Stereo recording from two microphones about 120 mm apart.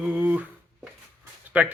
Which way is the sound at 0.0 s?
10° right (ahead or behind).